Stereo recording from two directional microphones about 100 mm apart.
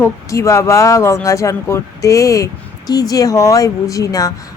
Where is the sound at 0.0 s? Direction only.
30° left (ahead or behind).